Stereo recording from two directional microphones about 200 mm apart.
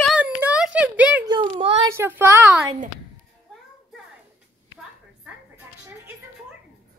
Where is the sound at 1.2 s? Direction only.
25° right (ahead or behind).